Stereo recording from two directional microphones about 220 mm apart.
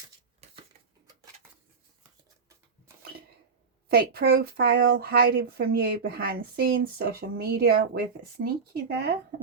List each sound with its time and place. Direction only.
3.8 s speech: 45° right (ahead or behind)